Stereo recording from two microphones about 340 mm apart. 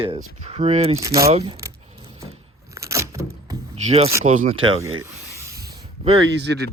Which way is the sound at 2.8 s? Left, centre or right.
Centre.